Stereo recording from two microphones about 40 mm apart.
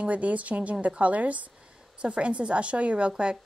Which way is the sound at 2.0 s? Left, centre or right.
Right.